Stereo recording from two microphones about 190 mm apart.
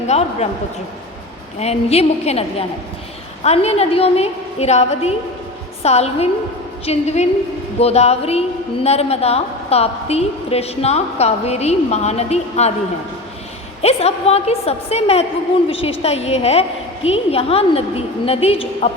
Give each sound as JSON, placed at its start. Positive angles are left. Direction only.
{"t": 0.1, "sound": "a woman's voice", "side_deg": 35}
{"t": 1.5, "sound": "a woman's voice", "side_deg": 35}
{"t": 13.8, "sound": "a woman's voice", "side_deg": 35}